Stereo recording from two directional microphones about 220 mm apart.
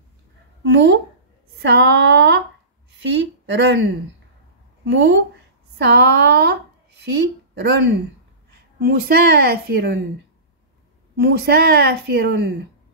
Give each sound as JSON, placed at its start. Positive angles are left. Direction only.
{"t": 0.7, "sound": "a woman's voice", "side_deg": -55}
{"t": 4.8, "sound": "a woman's voice", "side_deg": -55}
{"t": 11.1, "sound": "a woman's voice", "side_deg": -45}